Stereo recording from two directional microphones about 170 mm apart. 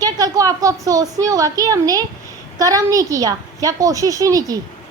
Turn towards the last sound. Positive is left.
turn(degrees=-20)  # may be behind; listen again after turning